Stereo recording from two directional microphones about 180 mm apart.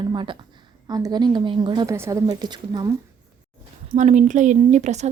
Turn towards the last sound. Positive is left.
turn(degrees=-40)  # may be behind; listen again after turning